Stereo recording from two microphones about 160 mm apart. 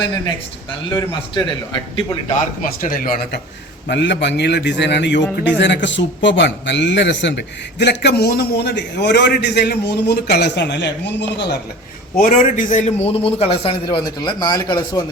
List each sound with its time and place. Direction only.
1.3 s a man's voice: 30° left (ahead or behind)
2.6 s speech: 60° left (ahead or behind)
3.8 s speech: 90° left
12.1 s a man's voice: 55° left (ahead or behind); by 15.0 s 25° left (ahead or behind)